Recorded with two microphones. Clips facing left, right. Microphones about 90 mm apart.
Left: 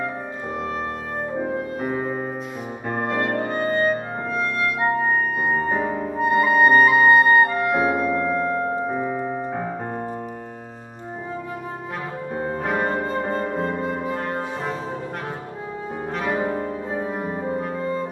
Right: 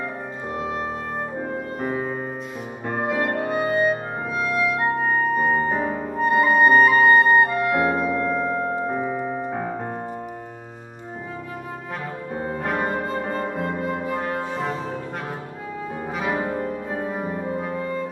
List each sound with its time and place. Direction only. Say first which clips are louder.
1.4 s music: left 2 dB; centre (ahead or behind)
2.9 s clarinet: even; centre (ahead or behind)
7.8 s music: left 1 dB; 5° left (ahead or behind)
8.8 s piano: even; centre (ahead or behind)
12.6 s music: left 1 dB; centre (ahead or behind)
13.6 s music: left 1 dB; 25° left (ahead or behind)
14.1 s brass instrument: right 1 dB; centre (ahead or behind)
16.2 s brass instrument: left 1 dB; 5° right (ahead or behind)